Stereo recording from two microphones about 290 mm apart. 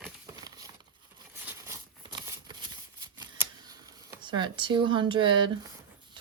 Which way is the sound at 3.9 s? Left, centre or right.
Centre.